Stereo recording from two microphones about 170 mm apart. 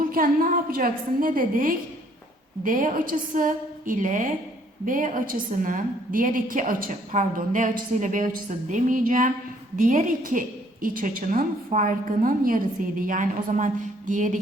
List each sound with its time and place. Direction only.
0.0 s a woman's voice: 55° right (ahead or behind)